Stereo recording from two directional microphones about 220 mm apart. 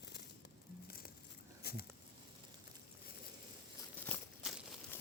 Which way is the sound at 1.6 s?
45° left (ahead or behind).